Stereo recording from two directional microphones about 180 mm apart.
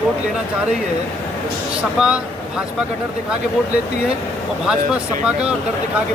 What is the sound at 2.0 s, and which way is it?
Speech, 5° right (ahead or behind).